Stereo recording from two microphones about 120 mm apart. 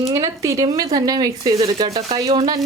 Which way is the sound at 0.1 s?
30° right (ahead or behind).